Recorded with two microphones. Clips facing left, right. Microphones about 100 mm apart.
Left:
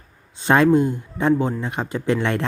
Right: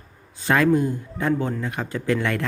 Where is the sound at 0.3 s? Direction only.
25° left (ahead or behind).